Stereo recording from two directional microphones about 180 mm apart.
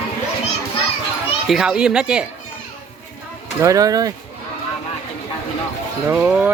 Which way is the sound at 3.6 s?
20° right (ahead or behind).